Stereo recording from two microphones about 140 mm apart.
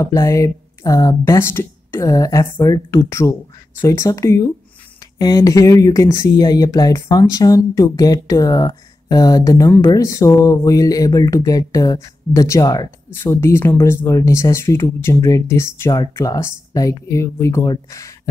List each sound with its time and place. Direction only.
0.0 s speech: 20° left (ahead or behind)